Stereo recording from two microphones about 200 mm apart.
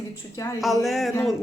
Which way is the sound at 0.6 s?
Centre (ahead or behind).